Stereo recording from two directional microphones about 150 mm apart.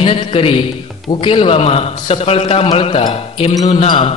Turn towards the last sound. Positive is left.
turn(degrees=40)  # may be behind; listen again after turning